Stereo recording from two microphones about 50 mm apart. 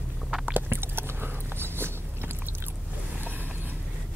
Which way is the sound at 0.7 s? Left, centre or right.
Right.